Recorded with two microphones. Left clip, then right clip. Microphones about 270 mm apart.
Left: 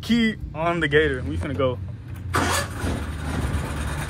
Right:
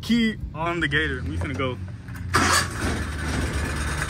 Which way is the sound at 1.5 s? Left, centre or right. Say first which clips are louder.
Left 5 dB; centre.